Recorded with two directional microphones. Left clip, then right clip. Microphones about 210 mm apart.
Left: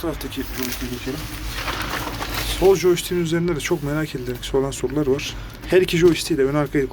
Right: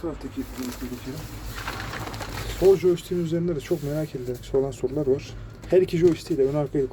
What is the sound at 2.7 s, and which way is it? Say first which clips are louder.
A man's voice: left 4 dB; 15° right (ahead or behind).